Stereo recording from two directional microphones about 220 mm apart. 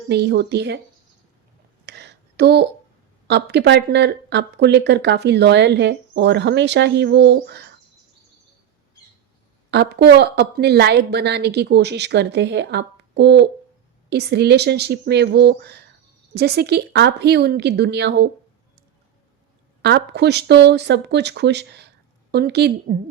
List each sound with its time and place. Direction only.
0.1 s speech: 50° right (ahead or behind)
1.9 s a sound: 50° right (ahead or behind)
3.2 s speech: 50° right (ahead or behind)
9.7 s speech: 50° right (ahead or behind)
19.8 s speech: 50° right (ahead or behind)